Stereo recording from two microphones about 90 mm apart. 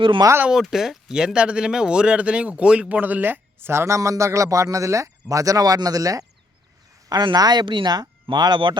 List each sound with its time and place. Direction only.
0.6 s speech: 5° right (ahead or behind); by 6.2 s 40° right (ahead or behind)
7.1 s speech: 50° right (ahead or behind)
7.9 s speech: 55° right (ahead or behind)